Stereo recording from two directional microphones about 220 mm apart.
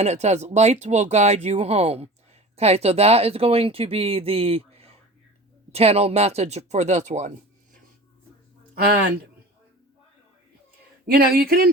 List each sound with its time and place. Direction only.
0.0 s speech: 30° right (ahead or behind)
11.0 s speech: 45° right (ahead or behind)